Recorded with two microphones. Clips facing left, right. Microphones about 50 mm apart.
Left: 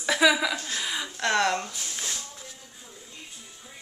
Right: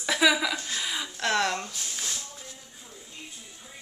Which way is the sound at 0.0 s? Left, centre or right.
Centre.